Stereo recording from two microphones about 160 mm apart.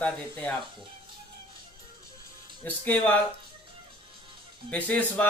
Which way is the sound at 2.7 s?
10° left (ahead or behind).